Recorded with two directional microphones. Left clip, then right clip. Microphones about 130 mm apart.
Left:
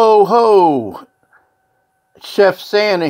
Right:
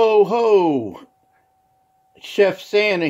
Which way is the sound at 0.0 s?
55° left (ahead or behind).